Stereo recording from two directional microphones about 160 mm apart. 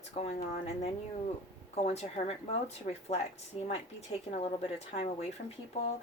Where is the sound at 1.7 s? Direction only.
45° left (ahead or behind).